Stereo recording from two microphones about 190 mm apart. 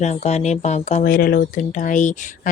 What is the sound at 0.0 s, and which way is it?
Speech, 35° left (ahead or behind).